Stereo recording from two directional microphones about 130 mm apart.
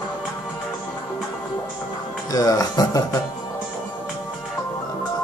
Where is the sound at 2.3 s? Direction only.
30° left (ahead or behind).